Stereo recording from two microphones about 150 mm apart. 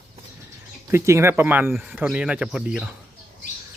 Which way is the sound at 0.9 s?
20° right (ahead or behind).